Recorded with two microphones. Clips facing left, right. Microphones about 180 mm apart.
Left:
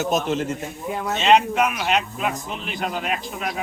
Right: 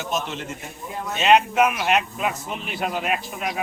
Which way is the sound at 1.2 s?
5° right (ahead or behind).